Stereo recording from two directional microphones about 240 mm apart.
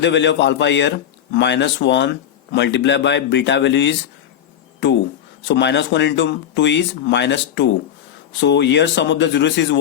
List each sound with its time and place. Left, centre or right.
0.0 s speech: left
5.5 s speech: left